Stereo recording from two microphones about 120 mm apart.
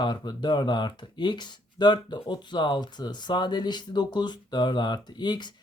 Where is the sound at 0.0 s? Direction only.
35° left (ahead or behind).